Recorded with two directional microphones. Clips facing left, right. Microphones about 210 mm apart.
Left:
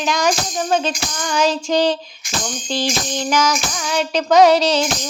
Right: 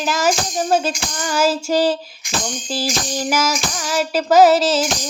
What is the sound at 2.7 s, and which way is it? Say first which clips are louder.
Tambourine: left 2 dB; 5° right (ahead or behind).